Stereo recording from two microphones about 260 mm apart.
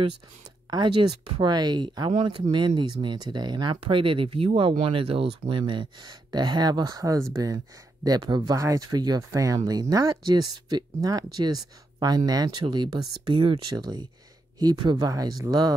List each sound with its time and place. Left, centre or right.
1.4 s speech: centre